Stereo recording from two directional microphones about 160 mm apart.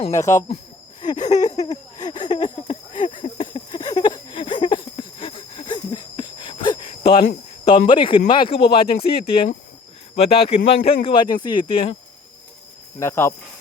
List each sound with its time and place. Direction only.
0.1 s a sound: 20° left (ahead or behind)
7.6 s speech: 35° left (ahead or behind)
13.0 s speech: 15° left (ahead or behind)